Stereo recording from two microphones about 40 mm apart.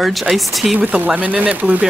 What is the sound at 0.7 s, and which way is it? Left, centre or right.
Speech, right.